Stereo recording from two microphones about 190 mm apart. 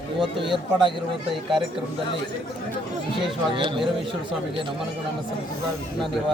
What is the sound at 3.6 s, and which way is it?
Speech, 25° right (ahead or behind).